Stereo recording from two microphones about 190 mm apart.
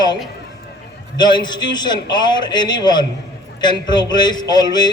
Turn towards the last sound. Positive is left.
turn(degrees=20)  # may be behind; listen again after turning